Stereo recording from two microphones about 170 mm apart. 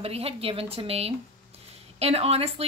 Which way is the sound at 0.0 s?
35° right (ahead or behind).